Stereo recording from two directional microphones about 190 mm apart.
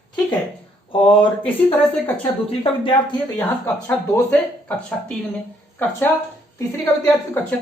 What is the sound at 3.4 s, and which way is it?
Speech, 10° left (ahead or behind).